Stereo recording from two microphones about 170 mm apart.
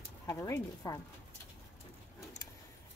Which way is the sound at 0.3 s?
20° left (ahead or behind).